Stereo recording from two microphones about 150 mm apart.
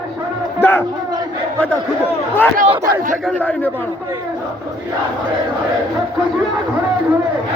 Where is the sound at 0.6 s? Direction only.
15° left (ahead or behind).